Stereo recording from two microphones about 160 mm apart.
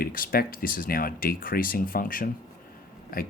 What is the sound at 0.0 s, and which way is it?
Speech, 65° left (ahead or behind).